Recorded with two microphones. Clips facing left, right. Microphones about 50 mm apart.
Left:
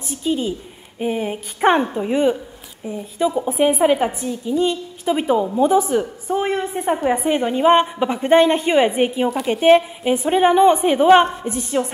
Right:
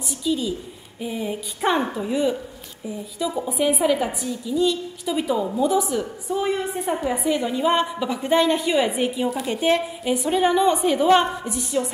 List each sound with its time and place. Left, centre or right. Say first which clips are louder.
0.1 s a woman's voice: left 3 dB; left